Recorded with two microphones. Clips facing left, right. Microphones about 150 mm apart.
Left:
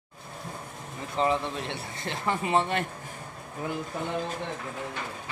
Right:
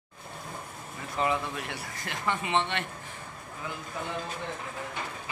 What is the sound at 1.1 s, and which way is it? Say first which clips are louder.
Speech: left 3 dB; 30° left (ahead or behind).